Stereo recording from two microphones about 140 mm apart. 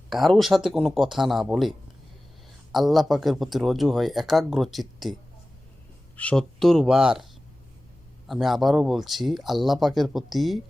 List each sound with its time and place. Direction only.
0.1 s speech: centre (ahead or behind)
2.7 s speech: centre (ahead or behind)
6.1 s speech: 5° left (ahead or behind)
8.3 s speech: centre (ahead or behind)